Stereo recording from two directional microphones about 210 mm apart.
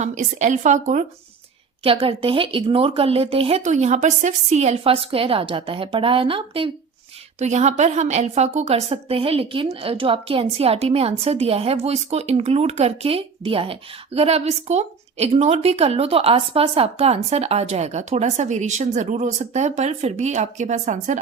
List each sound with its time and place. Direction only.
0.0 s a woman's voice: 35° right (ahead or behind)